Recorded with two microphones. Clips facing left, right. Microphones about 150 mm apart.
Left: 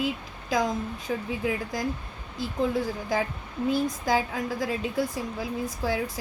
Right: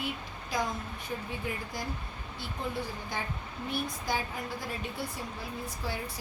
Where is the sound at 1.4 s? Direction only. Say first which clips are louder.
Left 8 dB; 90° left.